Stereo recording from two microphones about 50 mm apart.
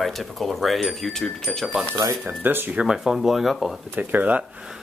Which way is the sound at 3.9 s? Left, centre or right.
Right.